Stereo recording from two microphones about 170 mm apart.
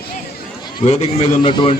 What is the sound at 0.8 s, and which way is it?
Speech, 40° left (ahead or behind).